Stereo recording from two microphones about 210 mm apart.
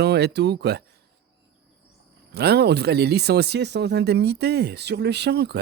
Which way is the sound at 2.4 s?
50° right (ahead or behind).